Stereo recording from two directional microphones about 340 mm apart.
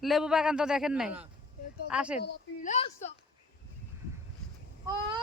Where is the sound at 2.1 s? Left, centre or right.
Left.